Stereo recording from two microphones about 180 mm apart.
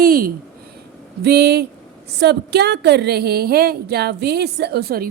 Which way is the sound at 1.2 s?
65° right (ahead or behind).